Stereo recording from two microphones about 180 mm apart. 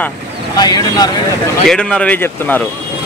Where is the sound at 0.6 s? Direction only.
20° left (ahead or behind).